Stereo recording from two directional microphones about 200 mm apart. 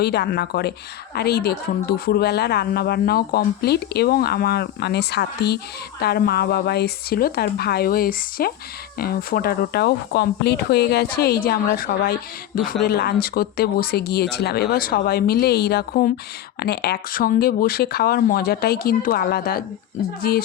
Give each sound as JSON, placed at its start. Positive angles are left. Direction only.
{"t": 0.0, "sound": "speech", "side_deg": 55}